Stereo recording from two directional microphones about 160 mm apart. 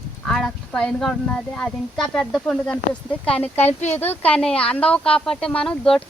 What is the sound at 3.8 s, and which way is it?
Speech, 10° left (ahead or behind).